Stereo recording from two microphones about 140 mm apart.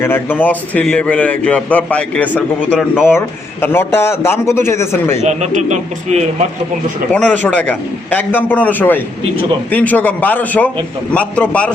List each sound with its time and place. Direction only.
0.0 s a man's voice: 15° left (ahead or behind)
5.2 s a man's voice: 55° right (ahead or behind)
7.1 s a man's voice: 10° left (ahead or behind)